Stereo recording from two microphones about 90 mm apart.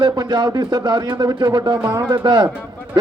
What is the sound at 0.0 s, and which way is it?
A man's voice, 55° right (ahead or behind).